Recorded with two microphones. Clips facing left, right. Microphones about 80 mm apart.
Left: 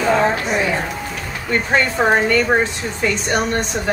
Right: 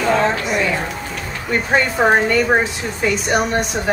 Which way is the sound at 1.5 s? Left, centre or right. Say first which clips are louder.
Even; centre.